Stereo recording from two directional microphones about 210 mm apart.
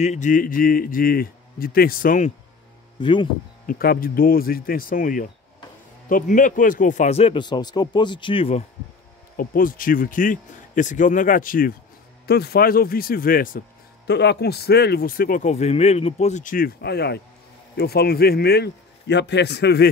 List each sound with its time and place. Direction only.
0.0 s speech: 35° left (ahead or behind)
3.0 s speech: 25° left (ahead or behind)
3.6 s a man's voice: 45° left (ahead or behind); by 8.6 s 25° left (ahead or behind)
9.4 s speech: 40° left (ahead or behind)